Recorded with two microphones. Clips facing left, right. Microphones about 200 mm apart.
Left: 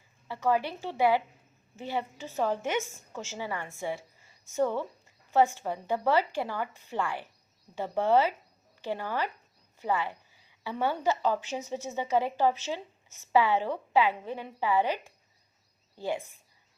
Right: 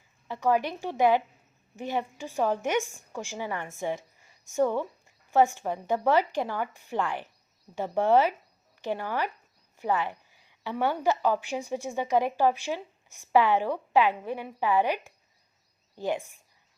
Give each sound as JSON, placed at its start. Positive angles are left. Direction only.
{"t": 0.3, "sound": "speech", "side_deg": -15}